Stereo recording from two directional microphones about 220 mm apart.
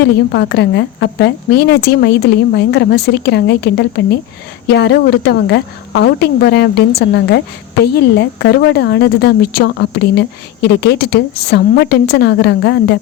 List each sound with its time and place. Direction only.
0.0 s a woman's voice: 50° left (ahead or behind)